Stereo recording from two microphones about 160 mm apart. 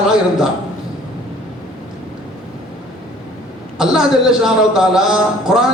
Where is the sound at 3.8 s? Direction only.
5° right (ahead or behind).